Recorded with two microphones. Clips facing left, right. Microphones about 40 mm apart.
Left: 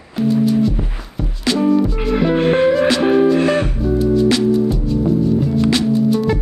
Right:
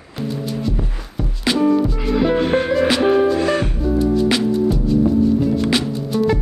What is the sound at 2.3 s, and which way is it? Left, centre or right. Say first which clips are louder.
Music: left 3 dB; left.